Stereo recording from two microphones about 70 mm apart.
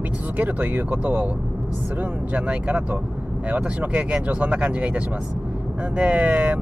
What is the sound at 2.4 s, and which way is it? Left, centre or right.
Speech, centre.